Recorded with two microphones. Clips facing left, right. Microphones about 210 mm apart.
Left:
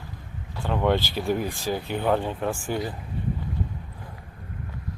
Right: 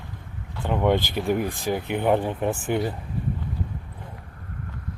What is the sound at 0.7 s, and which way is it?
Speech, 15° right (ahead or behind).